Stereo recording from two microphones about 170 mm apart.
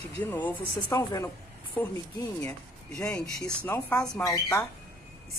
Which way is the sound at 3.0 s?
20° left (ahead or behind).